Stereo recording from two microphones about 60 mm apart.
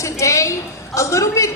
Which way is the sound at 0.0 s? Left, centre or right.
Left.